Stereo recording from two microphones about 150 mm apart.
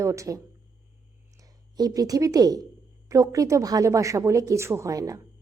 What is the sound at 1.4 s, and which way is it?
A woman's voice, 25° right (ahead or behind).